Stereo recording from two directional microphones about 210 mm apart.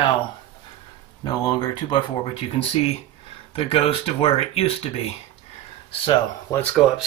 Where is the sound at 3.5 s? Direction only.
25° left (ahead or behind).